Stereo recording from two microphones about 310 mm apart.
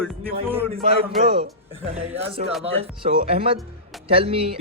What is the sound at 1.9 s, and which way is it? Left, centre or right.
A man's voice, centre.